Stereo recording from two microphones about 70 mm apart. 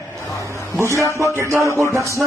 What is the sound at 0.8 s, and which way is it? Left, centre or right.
Speech, right.